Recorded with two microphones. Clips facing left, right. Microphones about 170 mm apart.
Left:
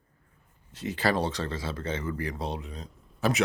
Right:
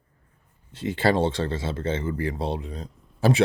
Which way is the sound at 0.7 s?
30° right (ahead or behind).